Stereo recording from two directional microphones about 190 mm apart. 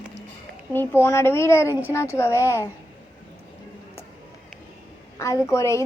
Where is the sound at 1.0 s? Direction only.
15° left (ahead or behind).